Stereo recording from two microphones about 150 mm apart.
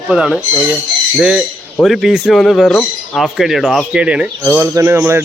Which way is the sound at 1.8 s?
Centre (ahead or behind).